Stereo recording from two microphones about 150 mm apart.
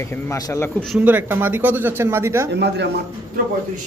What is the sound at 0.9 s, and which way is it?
Speech, 10° right (ahead or behind).